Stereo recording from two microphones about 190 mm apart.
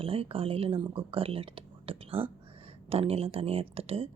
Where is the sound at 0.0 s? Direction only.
30° right (ahead or behind).